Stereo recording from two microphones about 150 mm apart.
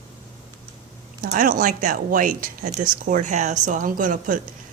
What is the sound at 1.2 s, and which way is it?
Speech, 65° right (ahead or behind).